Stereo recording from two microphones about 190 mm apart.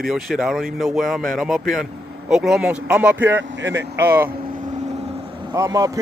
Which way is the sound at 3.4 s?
70° right (ahead or behind).